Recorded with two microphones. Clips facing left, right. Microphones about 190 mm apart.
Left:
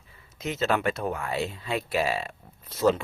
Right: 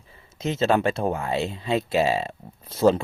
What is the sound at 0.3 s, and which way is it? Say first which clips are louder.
Speech: right 5 dB; 25° right (ahead or behind).